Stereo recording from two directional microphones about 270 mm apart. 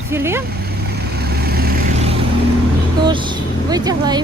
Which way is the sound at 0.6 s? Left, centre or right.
Right.